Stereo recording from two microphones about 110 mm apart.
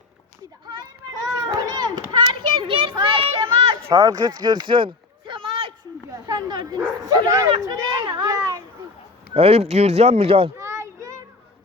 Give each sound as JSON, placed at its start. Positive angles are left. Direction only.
{"t": 1.4, "sound": "children playing", "side_deg": -35}
{"t": 3.2, "sound": "a sound", "side_deg": -50}
{"t": 3.9, "sound": "speech", "side_deg": -35}
{"t": 6.1, "sound": "bow-wow", "side_deg": -35}
{"t": 7.0, "sound": "speech", "side_deg": -30}
{"t": 7.8, "sound": "children playing", "side_deg": -40}
{"t": 9.3, "sound": "speech", "side_deg": -65}
{"t": 10.6, "sound": "child singing", "side_deg": -25}